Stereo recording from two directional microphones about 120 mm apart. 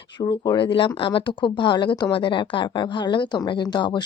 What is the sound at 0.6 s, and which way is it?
Speech, 45° left (ahead or behind).